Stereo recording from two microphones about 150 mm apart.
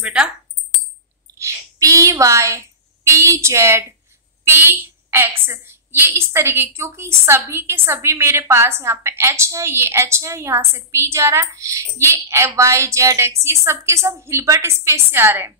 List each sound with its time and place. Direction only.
0.0 s a woman's voice: 10° right (ahead or behind)
1.4 s a woman's voice: 20° right (ahead or behind)